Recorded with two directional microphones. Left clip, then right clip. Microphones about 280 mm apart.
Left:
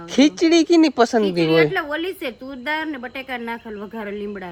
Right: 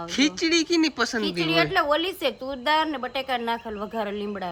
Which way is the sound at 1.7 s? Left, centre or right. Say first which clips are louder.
Right 1 dB; centre.